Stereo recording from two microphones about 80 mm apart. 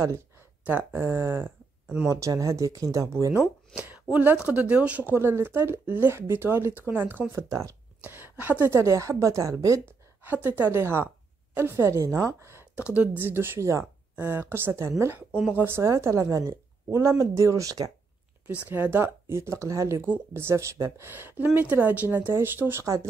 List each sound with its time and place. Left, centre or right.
0.7 s speech: right
2.0 s speech: right
3.7 s a woman's voice: centre
5.1 s speech: right
7.4 s speech: right
8.0 s speech: right
10.2 s speech: right
12.9 s speech: centre
13.3 s speech: right
18.5 s speech: right
21.1 s speech: right